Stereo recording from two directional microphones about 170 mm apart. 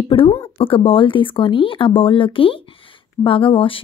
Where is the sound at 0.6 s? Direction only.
30° left (ahead or behind).